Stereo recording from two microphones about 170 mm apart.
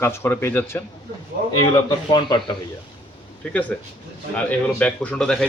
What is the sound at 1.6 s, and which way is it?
Speech, 25° left (ahead or behind).